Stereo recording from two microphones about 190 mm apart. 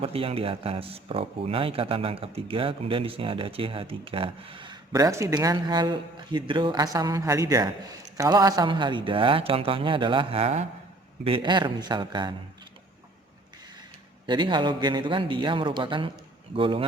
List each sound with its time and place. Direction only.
0.0 s speech: 30° right (ahead or behind)
14.3 s speech: 25° right (ahead or behind)